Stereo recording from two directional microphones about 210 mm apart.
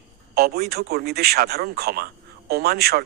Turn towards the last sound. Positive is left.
turn(degrees=-50)  # may be behind; listen again after turning